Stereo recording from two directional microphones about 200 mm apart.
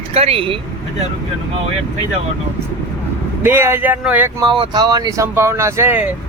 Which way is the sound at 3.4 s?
10° right (ahead or behind).